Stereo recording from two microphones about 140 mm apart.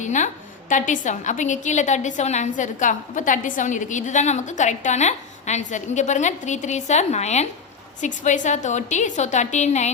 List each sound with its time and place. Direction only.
0.0 s a woman's voice: 60° left (ahead or behind)